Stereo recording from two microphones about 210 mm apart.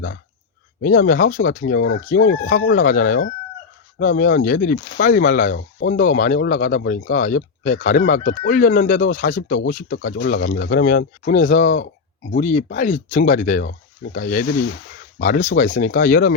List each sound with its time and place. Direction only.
0.8 s speech: 45° left (ahead or behind)